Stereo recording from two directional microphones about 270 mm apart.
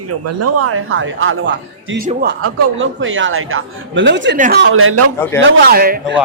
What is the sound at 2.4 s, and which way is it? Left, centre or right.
A man's voice, right.